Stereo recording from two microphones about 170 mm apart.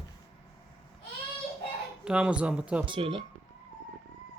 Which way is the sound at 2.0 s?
5° right (ahead or behind).